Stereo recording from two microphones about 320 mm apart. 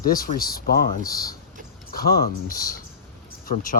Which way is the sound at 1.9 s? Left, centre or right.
Left.